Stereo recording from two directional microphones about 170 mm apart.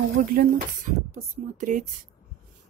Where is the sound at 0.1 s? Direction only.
60° right (ahead or behind).